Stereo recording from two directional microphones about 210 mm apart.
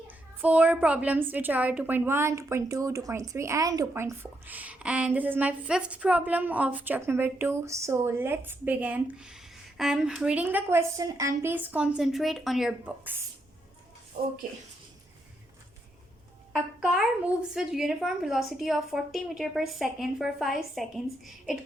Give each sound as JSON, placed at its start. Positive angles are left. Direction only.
{"t": 0.4, "sound": "a woman's voice", "side_deg": -5}
{"t": 14.2, "sound": "speech", "side_deg": -45}
{"t": 16.5, "sound": "a woman's voice", "side_deg": -5}